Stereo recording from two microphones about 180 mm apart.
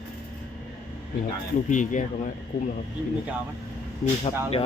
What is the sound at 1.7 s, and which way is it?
Speech, 45° left (ahead or behind).